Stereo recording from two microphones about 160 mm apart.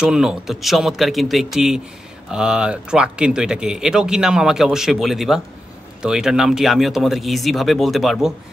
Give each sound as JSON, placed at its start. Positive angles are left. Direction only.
{"t": 0.0, "sound": "speech", "side_deg": -5}